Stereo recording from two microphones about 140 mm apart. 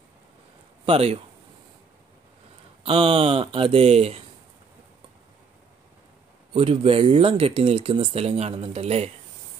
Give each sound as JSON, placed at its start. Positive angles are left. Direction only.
{"t": 0.8, "sound": "speech", "side_deg": -45}
{"t": 2.8, "sound": "speech", "side_deg": -40}
{"t": 6.5, "sound": "speech", "side_deg": -40}